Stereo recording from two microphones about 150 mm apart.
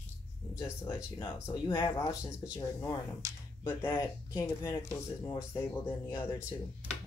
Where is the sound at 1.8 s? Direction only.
25° left (ahead or behind).